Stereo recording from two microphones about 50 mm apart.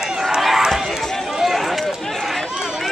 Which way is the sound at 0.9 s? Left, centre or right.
Centre.